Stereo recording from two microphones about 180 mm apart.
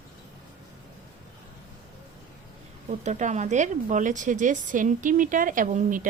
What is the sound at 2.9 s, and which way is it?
Speech, 40° right (ahead or behind).